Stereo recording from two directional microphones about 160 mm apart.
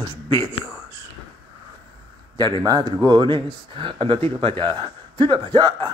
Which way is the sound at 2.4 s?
25° right (ahead or behind).